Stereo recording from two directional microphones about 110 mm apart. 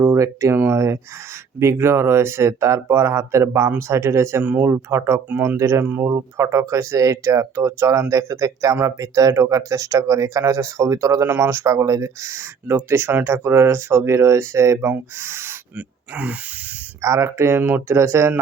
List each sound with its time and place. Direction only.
0.0 s speech: 25° right (ahead or behind)
4.4 s speech: 10° right (ahead or behind)
4.7 s speech: 25° right (ahead or behind)
5.3 s speech: 15° right (ahead or behind)
5.5 s speech: 25° right (ahead or behind)
5.8 s speech: 15° right (ahead or behind)
6.1 s speech: 30° right (ahead or behind)
17.0 s speech: 25° right (ahead or behind)